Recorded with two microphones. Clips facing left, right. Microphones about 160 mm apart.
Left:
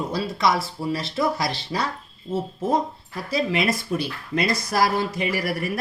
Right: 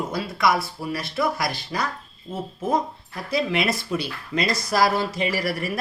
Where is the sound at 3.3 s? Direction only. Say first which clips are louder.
Even; 50° left (ahead or behind).